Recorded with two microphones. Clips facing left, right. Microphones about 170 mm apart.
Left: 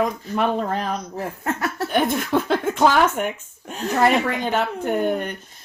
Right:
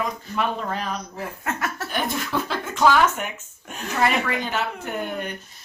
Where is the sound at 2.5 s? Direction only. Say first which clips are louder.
Even; 50° left (ahead or behind).